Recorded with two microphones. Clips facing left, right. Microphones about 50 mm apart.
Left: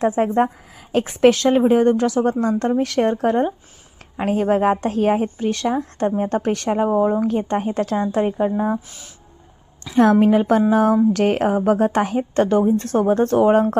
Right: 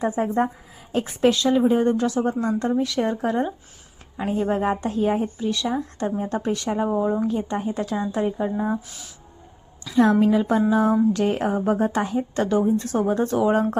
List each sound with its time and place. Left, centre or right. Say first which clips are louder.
0.0 s a woman's voice: left 5 dB; left
0.9 s a woman's voice: left 5 dB; left
4.2 s a woman's voice: left 5 dB; left
9.8 s a woman's voice: left 3 dB; left